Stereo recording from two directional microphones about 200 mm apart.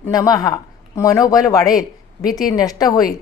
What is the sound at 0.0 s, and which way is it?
A woman's voice, 15° left (ahead or behind).